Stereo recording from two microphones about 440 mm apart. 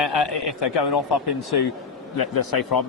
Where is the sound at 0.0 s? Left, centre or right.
Left.